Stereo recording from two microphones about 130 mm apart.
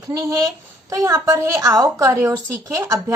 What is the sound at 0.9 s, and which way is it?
Speech, 20° right (ahead or behind).